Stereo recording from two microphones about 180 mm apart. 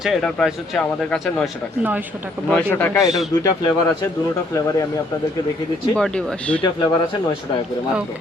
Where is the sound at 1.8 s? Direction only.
10° right (ahead or behind).